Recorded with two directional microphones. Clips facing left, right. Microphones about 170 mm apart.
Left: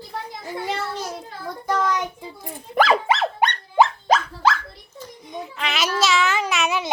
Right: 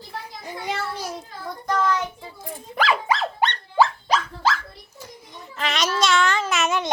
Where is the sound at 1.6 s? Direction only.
10° left (ahead or behind).